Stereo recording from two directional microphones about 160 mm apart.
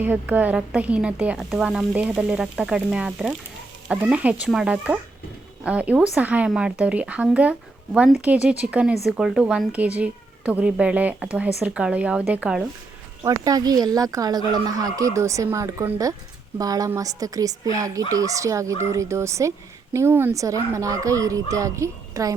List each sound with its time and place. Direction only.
0.0 s speech: 10° right (ahead or behind)
13.2 s speech: 20° right (ahead or behind)